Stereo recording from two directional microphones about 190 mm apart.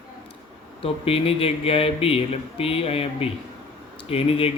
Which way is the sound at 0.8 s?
30° left (ahead or behind).